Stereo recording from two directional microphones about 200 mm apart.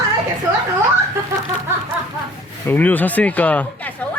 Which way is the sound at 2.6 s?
10° left (ahead or behind).